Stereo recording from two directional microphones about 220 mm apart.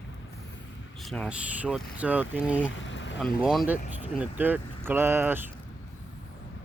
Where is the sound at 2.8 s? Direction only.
55° left (ahead or behind).